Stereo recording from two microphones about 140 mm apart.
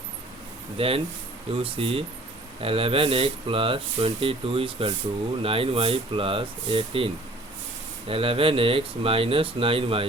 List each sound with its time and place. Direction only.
0.8 s speech: 40° right (ahead or behind)